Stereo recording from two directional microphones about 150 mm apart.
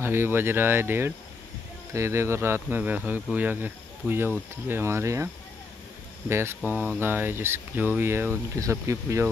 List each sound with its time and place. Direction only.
0.0 s speech: 15° right (ahead or behind)